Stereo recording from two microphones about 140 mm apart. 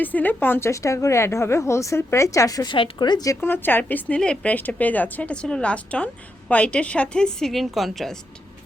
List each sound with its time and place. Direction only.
0.0 s a woman's voice: 10° left (ahead or behind); by 3.3 s 30° left (ahead or behind)
3.4 s a woman's voice: 15° left (ahead or behind)